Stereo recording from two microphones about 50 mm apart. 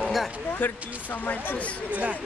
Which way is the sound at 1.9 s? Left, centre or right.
Right.